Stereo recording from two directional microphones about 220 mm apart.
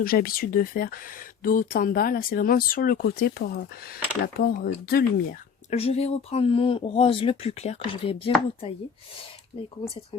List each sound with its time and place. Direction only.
0.0 s speech: 40° left (ahead or behind)
5.7 s speech: 30° left (ahead or behind)